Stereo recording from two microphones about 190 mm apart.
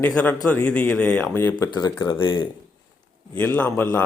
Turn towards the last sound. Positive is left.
turn(degrees=10)  # may be behind; listen again after turning